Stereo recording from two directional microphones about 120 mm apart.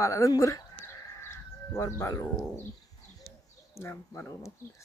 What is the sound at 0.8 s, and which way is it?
Bird, 25° left (ahead or behind).